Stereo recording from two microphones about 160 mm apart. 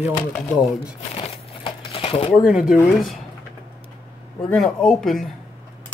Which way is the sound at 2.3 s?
5° right (ahead or behind).